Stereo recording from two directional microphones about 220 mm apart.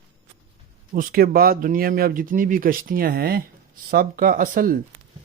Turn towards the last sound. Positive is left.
turn(degrees=-40)  # may be behind; listen again after turning